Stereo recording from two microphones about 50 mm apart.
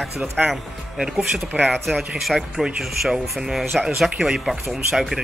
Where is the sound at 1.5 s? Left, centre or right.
Centre.